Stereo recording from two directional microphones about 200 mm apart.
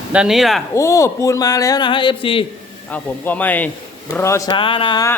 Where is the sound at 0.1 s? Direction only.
5° right (ahead or behind).